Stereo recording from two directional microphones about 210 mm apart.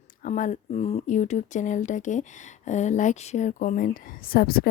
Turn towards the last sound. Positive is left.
turn(degrees=45)  # may be behind; listen again after turning